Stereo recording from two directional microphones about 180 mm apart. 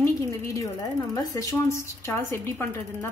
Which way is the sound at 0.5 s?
20° left (ahead or behind).